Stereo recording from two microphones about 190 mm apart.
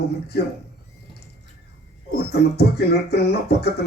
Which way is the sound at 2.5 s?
60° left (ahead or behind).